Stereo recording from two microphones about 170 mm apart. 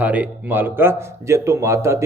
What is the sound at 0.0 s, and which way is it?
A man's voice, 10° right (ahead or behind).